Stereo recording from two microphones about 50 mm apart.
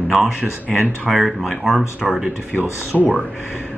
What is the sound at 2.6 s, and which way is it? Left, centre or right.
Speech, right.